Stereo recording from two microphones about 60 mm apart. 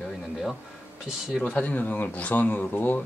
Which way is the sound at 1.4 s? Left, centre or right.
Left.